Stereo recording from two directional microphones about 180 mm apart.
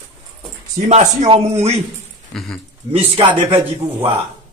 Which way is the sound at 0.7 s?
40° right (ahead or behind).